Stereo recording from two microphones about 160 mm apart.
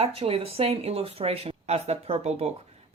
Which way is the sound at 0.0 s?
35° right (ahead or behind).